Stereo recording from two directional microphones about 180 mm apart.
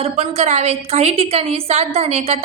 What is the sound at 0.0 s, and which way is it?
A woman's voice, 35° right (ahead or behind).